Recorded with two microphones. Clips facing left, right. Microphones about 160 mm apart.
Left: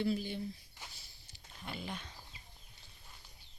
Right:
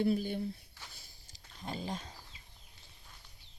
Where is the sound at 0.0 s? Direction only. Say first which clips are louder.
Right 4 dB; 50° right (ahead or behind).